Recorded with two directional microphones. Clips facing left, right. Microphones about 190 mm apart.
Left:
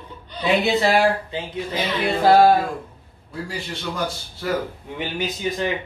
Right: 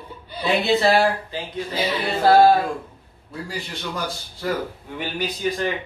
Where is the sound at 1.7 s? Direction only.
10° right (ahead or behind).